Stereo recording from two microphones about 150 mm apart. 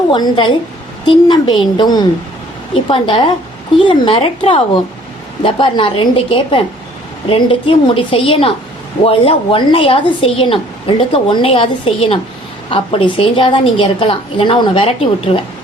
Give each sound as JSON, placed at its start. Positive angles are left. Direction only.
{"t": 0.1, "sound": "a woman's voice", "side_deg": 30}